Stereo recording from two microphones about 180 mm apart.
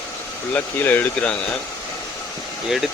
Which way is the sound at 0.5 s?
10° left (ahead or behind).